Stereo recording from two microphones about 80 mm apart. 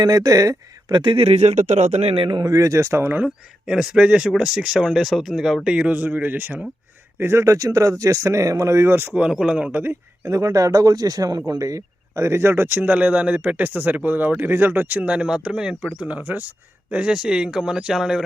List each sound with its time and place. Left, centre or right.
0.0 s speech: right
2.1 s speech: right
2.4 s speech: right
3.2 s a man's voice: centre; by 6.7 s right
7.2 s speech: right
9.1 s speech: centre; by 10.0 s right
10.2 s a man's voice: right; by 18.2 s centre